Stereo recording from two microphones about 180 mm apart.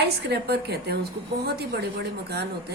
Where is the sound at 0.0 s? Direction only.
65° right (ahead or behind).